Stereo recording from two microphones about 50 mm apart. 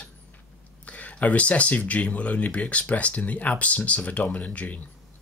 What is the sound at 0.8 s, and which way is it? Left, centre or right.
Speech, left.